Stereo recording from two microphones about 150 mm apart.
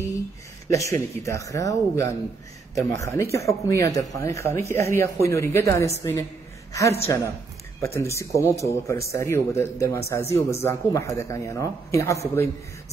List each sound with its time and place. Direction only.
0.7 s speech: 20° left (ahead or behind)